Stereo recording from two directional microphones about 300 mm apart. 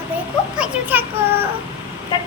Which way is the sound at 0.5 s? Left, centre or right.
Centre.